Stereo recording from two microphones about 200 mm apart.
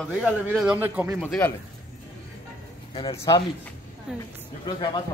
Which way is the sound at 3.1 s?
15° left (ahead or behind).